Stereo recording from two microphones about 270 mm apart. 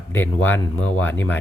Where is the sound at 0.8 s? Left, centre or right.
Left.